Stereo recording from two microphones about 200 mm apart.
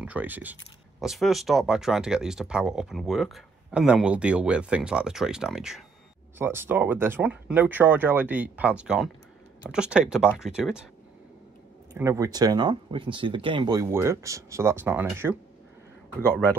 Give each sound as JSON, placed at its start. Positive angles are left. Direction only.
{"t": 0.0, "sound": "speech", "side_deg": -10}
{"t": 11.9, "sound": "speech", "side_deg": -15}